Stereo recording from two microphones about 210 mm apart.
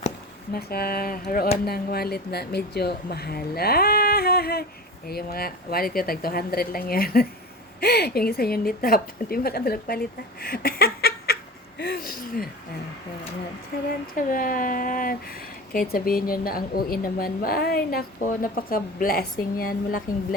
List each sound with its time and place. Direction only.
0.5 s a woman's voice: 45° left (ahead or behind)
10.4 s a sound: 45° left (ahead or behind)
13.7 s a woman's voice: 45° left (ahead or behind)